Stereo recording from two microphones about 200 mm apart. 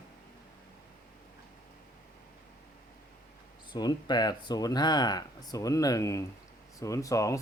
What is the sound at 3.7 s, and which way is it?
Speech, 20° left (ahead or behind).